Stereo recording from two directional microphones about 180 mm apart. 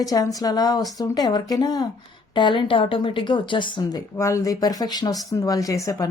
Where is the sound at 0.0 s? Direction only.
20° left (ahead or behind).